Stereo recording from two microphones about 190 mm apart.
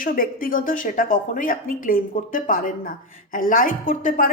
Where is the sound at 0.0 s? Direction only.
50° left (ahead or behind).